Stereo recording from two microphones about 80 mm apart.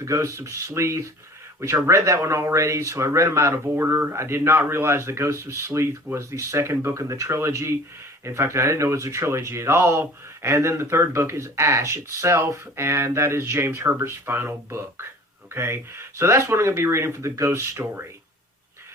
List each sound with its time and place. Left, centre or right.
0.0 s speech: right